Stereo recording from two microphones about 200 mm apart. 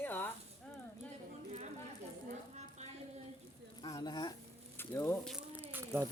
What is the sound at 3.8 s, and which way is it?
Speech, 20° left (ahead or behind).